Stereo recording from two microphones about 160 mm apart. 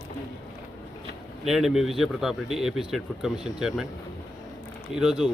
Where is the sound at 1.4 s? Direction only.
Centre (ahead or behind).